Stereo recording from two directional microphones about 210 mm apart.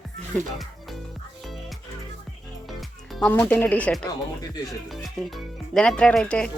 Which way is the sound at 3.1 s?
5° left (ahead or behind).